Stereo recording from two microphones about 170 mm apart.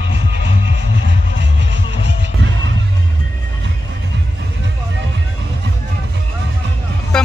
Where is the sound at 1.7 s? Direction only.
90° right.